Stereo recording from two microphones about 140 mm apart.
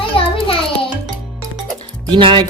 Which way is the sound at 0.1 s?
40° left (ahead or behind).